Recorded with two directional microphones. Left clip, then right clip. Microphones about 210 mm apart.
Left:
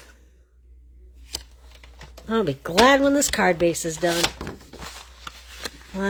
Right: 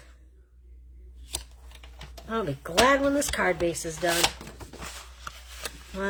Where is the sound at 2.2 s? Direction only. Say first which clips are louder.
Left 7 dB; 40° left (ahead or behind).